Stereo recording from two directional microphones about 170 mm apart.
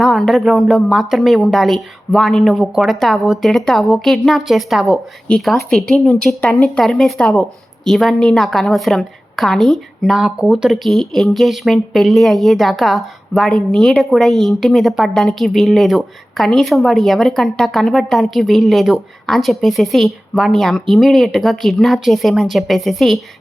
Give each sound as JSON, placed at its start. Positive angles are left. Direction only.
{"t": 0.0, "sound": "a woman's voice", "side_deg": 0}